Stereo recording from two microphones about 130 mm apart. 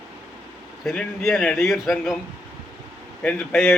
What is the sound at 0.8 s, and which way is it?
Speech, centre (ahead or behind).